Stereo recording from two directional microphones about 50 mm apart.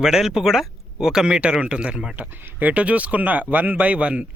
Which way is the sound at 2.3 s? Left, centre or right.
Right.